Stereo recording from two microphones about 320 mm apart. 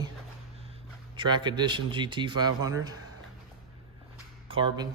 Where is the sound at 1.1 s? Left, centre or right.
Centre.